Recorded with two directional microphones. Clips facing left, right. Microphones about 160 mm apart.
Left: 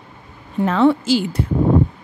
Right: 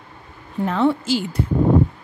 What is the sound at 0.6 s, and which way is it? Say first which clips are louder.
Speech: left 4 dB; 90° left.